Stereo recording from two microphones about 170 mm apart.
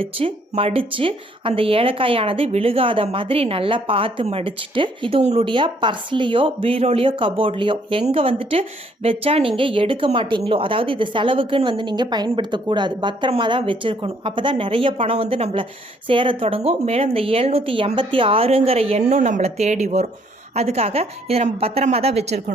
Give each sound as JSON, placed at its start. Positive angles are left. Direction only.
{"t": 0.0, "sound": "speech", "side_deg": -35}